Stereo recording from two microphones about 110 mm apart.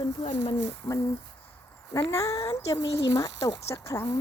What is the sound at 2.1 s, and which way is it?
Speech, 30° left (ahead or behind).